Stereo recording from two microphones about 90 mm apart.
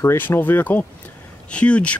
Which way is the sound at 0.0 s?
30° left (ahead or behind).